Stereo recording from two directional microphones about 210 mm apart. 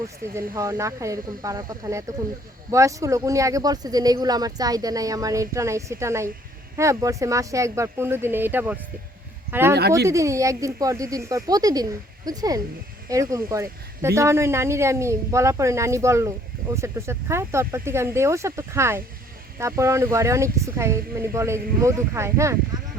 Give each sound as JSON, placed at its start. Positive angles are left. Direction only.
{"t": 0.3, "sound": "speech", "side_deg": -15}